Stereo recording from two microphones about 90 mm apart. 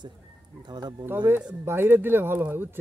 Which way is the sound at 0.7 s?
50° right (ahead or behind).